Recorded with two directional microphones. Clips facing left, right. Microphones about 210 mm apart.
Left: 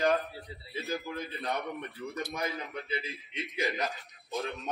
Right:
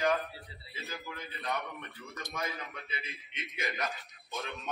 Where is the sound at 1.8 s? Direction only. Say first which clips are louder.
Left 8 dB; 35° left (ahead or behind).